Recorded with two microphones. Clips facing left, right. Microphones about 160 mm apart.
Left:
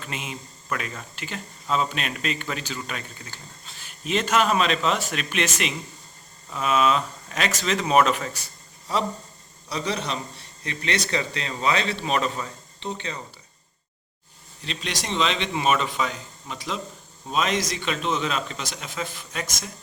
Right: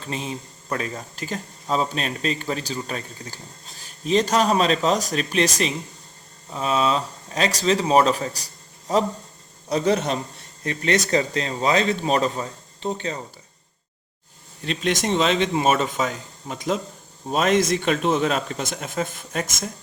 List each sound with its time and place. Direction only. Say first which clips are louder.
0.0 s speech: right 5 dB; 35° right (ahead or behind)
14.6 s speech: right 9 dB; 50° right (ahead or behind)